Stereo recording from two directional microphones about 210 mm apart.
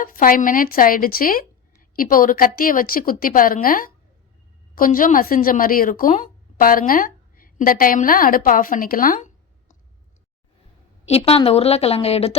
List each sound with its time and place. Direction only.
0.0 s a woman's voice: 40° left (ahead or behind)
11.0 s a woman's voice: 30° left (ahead or behind)